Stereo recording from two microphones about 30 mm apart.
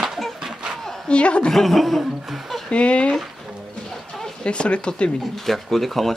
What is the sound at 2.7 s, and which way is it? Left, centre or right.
Speech, left.